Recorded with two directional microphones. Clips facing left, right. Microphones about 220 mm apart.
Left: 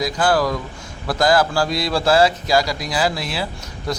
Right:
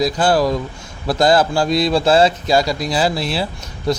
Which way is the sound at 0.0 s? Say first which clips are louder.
Right 3 dB; 25° right (ahead or behind).